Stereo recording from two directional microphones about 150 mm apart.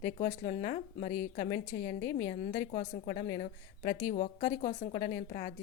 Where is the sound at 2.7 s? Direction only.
50° left (ahead or behind).